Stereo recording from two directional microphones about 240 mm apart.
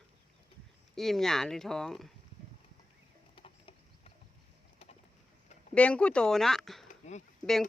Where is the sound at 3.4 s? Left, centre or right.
Left.